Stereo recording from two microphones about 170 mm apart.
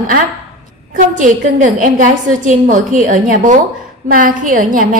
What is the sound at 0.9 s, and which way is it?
A woman's voice, 50° right (ahead or behind).